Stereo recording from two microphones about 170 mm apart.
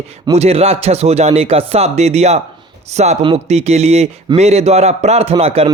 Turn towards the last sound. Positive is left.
turn(degrees=-35)  # may be behind; listen again after turning